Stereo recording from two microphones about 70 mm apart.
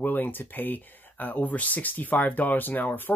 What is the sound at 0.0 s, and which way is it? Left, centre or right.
Speech, left.